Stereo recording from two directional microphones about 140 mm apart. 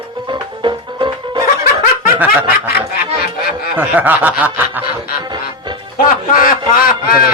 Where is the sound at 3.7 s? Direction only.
10° right (ahead or behind).